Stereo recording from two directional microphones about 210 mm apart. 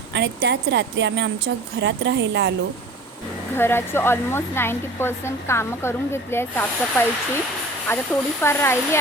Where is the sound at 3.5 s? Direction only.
10° left (ahead or behind).